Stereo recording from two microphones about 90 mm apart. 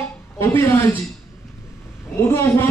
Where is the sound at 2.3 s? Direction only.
30° left (ahead or behind).